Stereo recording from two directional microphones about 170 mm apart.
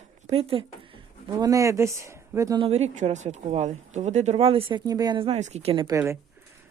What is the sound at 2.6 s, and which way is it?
Speech, 40° right (ahead or behind).